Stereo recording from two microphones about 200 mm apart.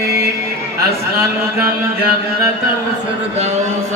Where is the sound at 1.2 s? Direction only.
15° right (ahead or behind).